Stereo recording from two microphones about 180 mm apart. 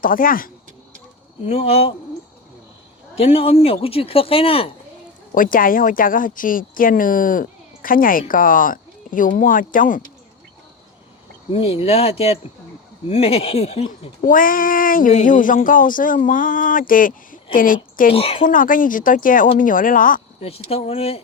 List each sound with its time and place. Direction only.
0.0 s speech: 50° left (ahead or behind)
1.5 s speech: 35° left (ahead or behind)
3.2 s speech: 35° left (ahead or behind)
5.3 s speech: 50° left (ahead or behind)
11.5 s speech: 30° left (ahead or behind)
14.2 s speech: 50° left (ahead or behind)
18.1 s speech: 30° left (ahead or behind)
18.4 s speech: 50° left (ahead or behind)
20.4 s speech: 35° left (ahead or behind)